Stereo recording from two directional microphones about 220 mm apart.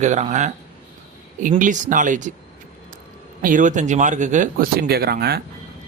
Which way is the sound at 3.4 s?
35° right (ahead or behind).